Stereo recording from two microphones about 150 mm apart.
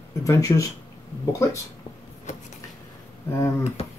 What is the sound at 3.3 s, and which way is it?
Speech, 20° left (ahead or behind).